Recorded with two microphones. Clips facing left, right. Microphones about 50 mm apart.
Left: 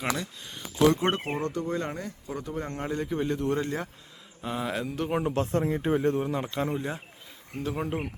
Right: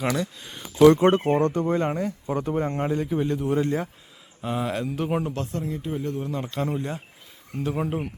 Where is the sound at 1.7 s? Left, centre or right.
Right.